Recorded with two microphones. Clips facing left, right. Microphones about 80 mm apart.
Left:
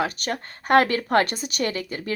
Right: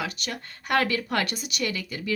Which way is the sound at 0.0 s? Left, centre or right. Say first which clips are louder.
Left 6 dB; left.